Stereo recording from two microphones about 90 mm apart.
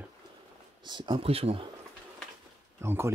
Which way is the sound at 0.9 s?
60° right (ahead or behind).